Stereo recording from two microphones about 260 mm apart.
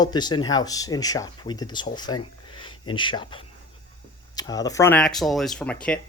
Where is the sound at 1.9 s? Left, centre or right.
Centre.